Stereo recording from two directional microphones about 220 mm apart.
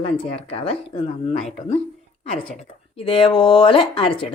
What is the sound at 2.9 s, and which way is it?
Speech, 25° left (ahead or behind).